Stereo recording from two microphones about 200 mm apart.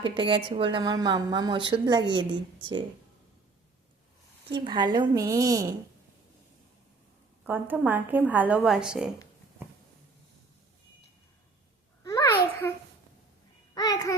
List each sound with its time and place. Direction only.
0.0 s a woman's voice: 25° right (ahead or behind)
4.5 s a woman's voice: 25° right (ahead or behind)
7.4 s a woman's voice: 10° right (ahead or behind)
12.6 s babbling: 10° left (ahead or behind)
13.7 s a sound: 20° left (ahead or behind)